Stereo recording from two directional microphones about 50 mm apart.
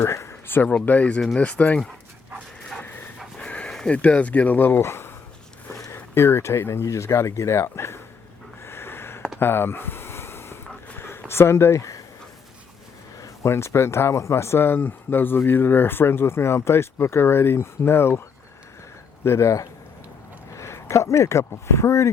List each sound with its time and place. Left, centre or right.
0.0 s speech: left
0.4 s speech: left
0.7 s speech: left
3.3 s dog: left
3.8 s speech: left
4.8 s a sound: left
5.7 s speech: left
8.6 s a sound: left
13.1 s a sound: left
13.5 s speech: left
19.2 s speech: left